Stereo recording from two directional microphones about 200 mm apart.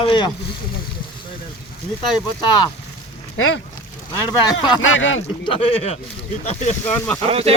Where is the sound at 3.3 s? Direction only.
90° left.